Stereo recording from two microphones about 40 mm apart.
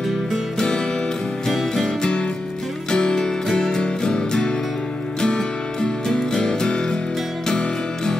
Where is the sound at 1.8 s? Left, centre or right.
Left.